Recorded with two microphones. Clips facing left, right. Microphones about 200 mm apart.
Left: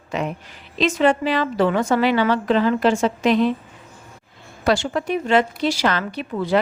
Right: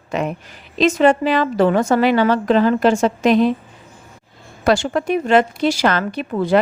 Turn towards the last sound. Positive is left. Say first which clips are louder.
# right 4 dB
turn(degrees=-50)  # may be behind; listen again after turning